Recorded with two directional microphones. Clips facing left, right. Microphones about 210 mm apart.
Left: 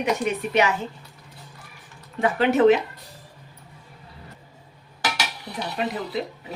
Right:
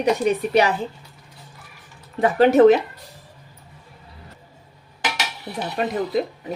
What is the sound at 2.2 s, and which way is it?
Speech, 40° right (ahead or behind).